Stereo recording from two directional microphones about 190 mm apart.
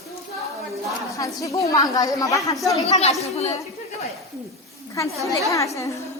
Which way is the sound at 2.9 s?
35° left (ahead or behind).